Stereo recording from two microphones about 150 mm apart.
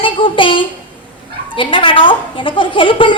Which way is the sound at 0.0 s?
35° left (ahead or behind).